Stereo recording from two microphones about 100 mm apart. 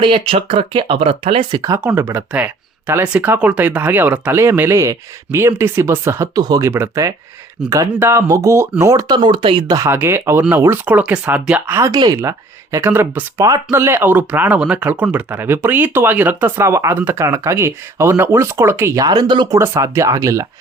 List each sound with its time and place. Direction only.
0.0 s speech: 60° right (ahead or behind)
2.0 s speech: 25° right (ahead or behind)
6.4 s speech: 40° right (ahead or behind)
6.7 s speech: 25° right (ahead or behind); by 9.6 s 60° right (ahead or behind)
9.6 s speech: 35° right (ahead or behind)
9.9 s speech: 25° right (ahead or behind)
19.0 s speech: 45° right (ahead or behind)
19.5 s speech: 30° right (ahead or behind)